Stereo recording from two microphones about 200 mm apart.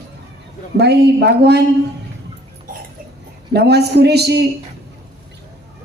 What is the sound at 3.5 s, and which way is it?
Speech, 55° right (ahead or behind).